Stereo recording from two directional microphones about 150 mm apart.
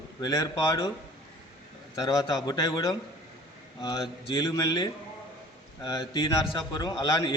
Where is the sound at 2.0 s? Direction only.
25° left (ahead or behind).